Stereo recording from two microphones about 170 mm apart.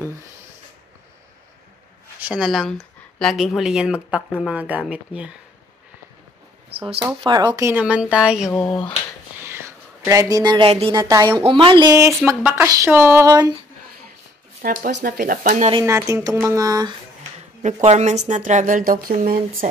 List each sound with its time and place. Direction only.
2.1 s speech: 5° right (ahead or behind)
7.2 s speech: 25° right (ahead or behind)
7.7 s speech: 5° right (ahead or behind)
14.6 s speech: 55° right (ahead or behind)
14.9 s speech: 80° right; by 15.7 s 50° right (ahead or behind)
15.8 s speech: 15° right (ahead or behind)
17.8 s a woman's voice: 45° right (ahead or behind)